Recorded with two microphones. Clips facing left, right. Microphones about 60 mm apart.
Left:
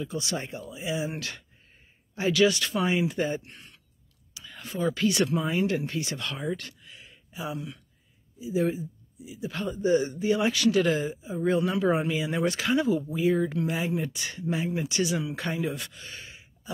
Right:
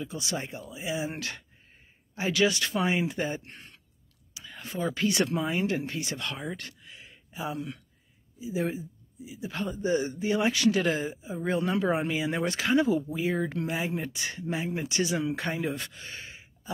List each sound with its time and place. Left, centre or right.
0.0 s speech: right